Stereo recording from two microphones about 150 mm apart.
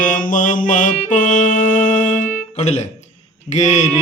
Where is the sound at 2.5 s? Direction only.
50° left (ahead or behind).